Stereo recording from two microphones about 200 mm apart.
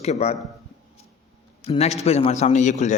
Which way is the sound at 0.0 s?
35° left (ahead or behind).